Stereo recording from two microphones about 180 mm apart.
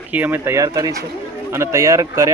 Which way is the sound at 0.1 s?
10° right (ahead or behind).